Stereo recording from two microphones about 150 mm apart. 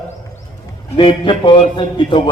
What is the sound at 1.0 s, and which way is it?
A man's voice, 35° left (ahead or behind).